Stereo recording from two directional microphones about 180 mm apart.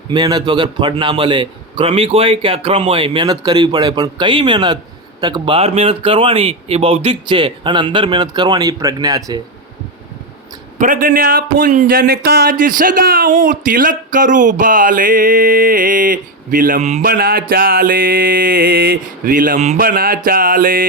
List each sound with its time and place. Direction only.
0.1 s a man's voice: 25° right (ahead or behind)
10.8 s speech: 50° right (ahead or behind)
17.1 s speech: 55° right (ahead or behind)